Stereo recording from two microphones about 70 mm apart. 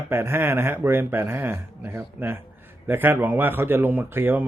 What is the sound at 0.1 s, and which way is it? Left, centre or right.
Speech, right.